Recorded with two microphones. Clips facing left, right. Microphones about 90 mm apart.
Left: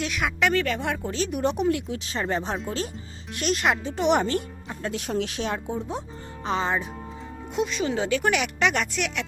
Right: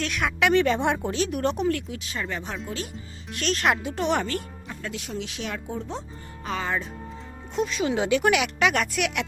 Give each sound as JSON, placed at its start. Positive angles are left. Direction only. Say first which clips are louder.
{"t": 0.0, "sound": "speech", "louder": "right 1 dB", "side_deg": 0}
{"t": 0.5, "sound": "speech", "louder": "right 4 dB", "side_deg": -20}
{"t": 1.0, "sound": "speech", "louder": "even", "side_deg": -5}
{"t": 1.9, "sound": "speech", "louder": "left 4 dB", "side_deg": 35}
{"t": 3.3, "sound": "speech", "louder": "even", "side_deg": 10}
{"t": 4.1, "sound": "music", "louder": "left 3 dB", "side_deg": 20}
{"t": 4.9, "sound": "speech", "louder": "left 6 dB", "side_deg": 45}
{"t": 5.4, "sound": "speech", "louder": "left 3 dB", "side_deg": 30}
{"t": 7.5, "sound": "speech", "louder": "even", "side_deg": 0}
{"t": 7.9, "sound": "speech", "louder": "right 4 dB", "side_deg": -10}